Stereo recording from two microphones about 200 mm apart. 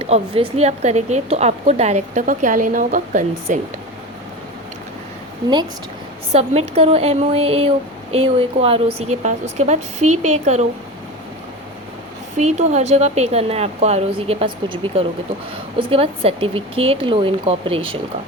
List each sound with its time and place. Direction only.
0.0 s a woman's voice: 30° right (ahead or behind)
6.3 s a woman's voice: 30° right (ahead or behind)
12.4 s a woman's voice: 35° right (ahead or behind)